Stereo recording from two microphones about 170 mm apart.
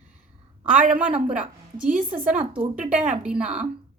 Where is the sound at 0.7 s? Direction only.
50° right (ahead or behind).